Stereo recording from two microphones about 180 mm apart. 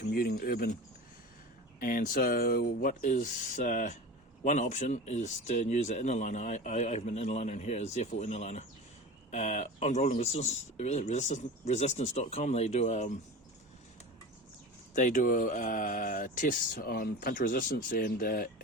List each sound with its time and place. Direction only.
0.0 s speech: 55° left (ahead or behind)
1.8 s speech: 50° left (ahead or behind)
14.9 s speech: 45° left (ahead or behind)